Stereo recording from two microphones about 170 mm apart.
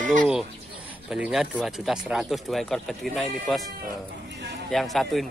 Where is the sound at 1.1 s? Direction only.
5° right (ahead or behind).